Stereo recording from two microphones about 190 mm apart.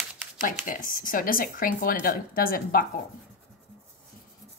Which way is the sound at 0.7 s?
45° left (ahead or behind).